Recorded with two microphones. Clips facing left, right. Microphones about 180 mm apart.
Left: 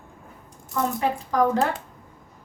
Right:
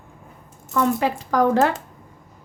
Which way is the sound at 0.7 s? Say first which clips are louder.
Right 4 dB; 90° right.